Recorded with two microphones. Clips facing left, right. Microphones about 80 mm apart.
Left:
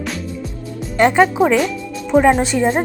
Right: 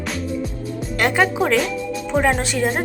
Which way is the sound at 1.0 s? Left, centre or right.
Left.